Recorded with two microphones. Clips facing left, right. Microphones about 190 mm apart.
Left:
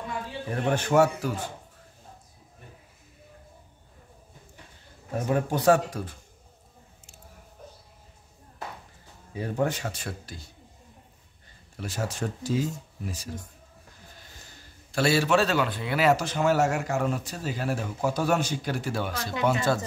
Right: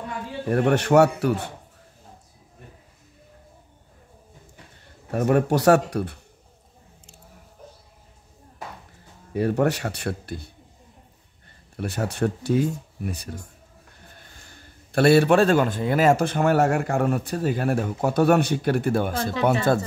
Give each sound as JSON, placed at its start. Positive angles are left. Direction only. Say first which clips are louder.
{"t": 0.5, "sound": "a man's voice", "louder": "right 7 dB", "side_deg": -65}
{"t": 5.1, "sound": "speech", "louder": "right 6 dB", "side_deg": -65}
{"t": 9.3, "sound": "a man's voice", "louder": "right 6 dB", "side_deg": -70}
{"t": 11.7, "sound": "a man's voice", "louder": "right 5 dB", "side_deg": -60}